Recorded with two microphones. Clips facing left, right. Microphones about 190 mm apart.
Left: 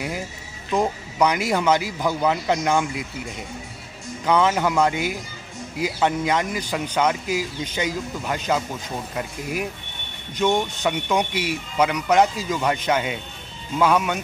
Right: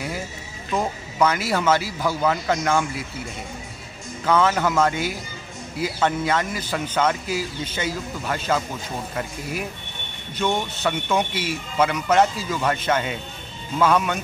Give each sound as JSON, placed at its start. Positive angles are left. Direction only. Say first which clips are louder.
{"t": 0.7, "sound": "speech", "louder": "left 1 dB", "side_deg": 15}
{"t": 4.3, "sound": "speech", "louder": "even", "side_deg": 15}